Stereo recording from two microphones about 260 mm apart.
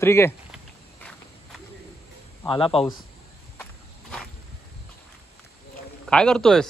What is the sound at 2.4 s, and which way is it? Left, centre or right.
Speech, centre.